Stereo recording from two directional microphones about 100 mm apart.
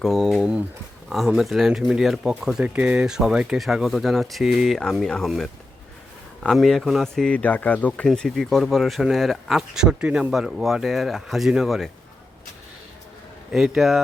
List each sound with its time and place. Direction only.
0.0 s speech: centre (ahead or behind)
7.3 s speech: 15° left (ahead or behind); by 11.9 s centre (ahead or behind)
13.5 s speech: centre (ahead or behind)